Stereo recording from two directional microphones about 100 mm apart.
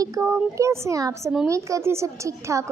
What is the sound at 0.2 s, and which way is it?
Speech, 30° right (ahead or behind).